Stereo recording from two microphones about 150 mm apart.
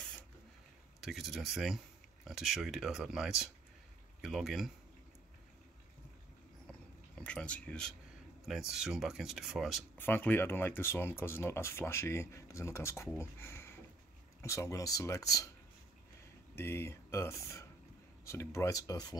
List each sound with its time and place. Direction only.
1.0 s speech: centre (ahead or behind)
7.2 s speech: 5° left (ahead or behind)
9.9 s speech: 15° left (ahead or behind)
16.5 s speech: 15° left (ahead or behind)